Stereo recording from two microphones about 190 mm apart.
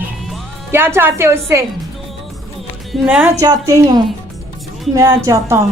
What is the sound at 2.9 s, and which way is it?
Speech, 5° right (ahead or behind).